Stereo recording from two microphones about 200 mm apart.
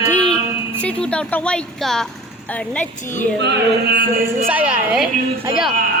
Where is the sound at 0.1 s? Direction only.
5° left (ahead or behind).